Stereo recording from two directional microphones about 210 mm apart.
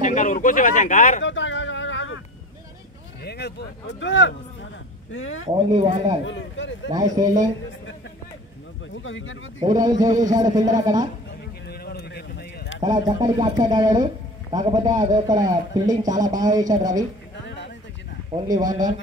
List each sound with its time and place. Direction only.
0.0 s speech: 40° left (ahead or behind)
1.2 s a sound: 60° left (ahead or behind)
3.3 s speech: 50° left (ahead or behind)
5.1 s speech: 70° left (ahead or behind)
5.4 s speech: 25° right (ahead or behind)
6.2 s speech: 60° left (ahead or behind)
6.9 s a man's voice: 15° right (ahead or behind)
8.9 s speech: 65° left (ahead or behind)
9.7 s a man's voice: 20° right (ahead or behind)
11.6 s a sound: 50° left (ahead or behind)
12.8 s a man's voice: 20° right (ahead or behind)
18.3 s speech: 20° right (ahead or behind)